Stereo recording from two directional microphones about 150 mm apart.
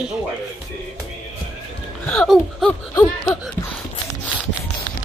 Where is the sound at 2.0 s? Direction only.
5° left (ahead or behind).